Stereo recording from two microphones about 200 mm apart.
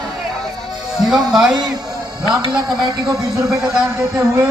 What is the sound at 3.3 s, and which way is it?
Speech, 15° right (ahead or behind).